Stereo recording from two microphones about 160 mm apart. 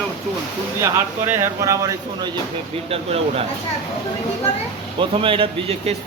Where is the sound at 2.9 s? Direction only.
40° right (ahead or behind).